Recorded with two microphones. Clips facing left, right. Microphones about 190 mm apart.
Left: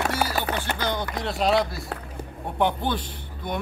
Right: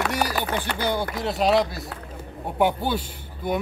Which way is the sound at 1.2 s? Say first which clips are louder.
Right 2 dB; centre (ahead or behind).